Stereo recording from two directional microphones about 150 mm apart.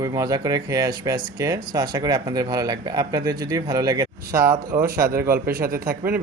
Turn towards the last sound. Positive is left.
turn(degrees=-80)